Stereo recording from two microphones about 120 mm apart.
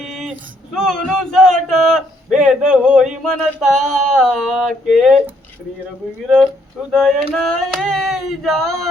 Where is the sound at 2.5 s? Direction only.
10° right (ahead or behind).